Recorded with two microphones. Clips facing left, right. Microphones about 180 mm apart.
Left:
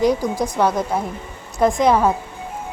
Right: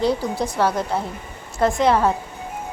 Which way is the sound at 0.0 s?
15° left (ahead or behind).